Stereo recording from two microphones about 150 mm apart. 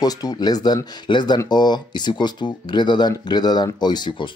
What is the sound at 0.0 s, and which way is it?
Speech, 25° left (ahead or behind).